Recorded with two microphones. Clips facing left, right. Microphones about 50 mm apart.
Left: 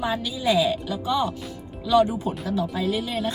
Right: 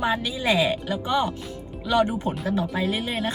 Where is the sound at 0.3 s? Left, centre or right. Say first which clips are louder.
Left 4 dB; right.